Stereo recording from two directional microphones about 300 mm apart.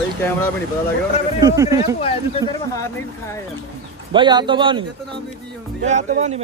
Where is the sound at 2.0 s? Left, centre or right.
Centre.